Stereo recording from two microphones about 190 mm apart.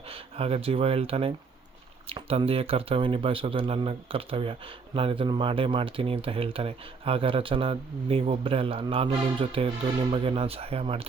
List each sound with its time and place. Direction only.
0.1 s speech: 30° right (ahead or behind)